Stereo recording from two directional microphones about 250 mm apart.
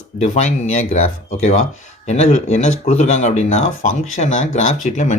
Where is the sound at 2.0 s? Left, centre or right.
Left.